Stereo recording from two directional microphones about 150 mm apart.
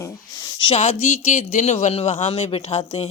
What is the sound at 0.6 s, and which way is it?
Speech, 45° left (ahead or behind).